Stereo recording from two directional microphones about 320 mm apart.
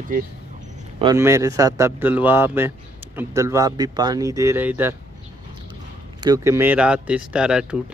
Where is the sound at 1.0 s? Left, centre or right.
Centre.